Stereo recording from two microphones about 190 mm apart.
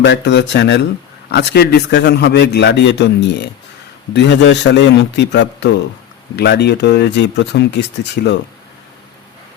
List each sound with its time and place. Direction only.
0.0 s a man's voice: 70° left (ahead or behind)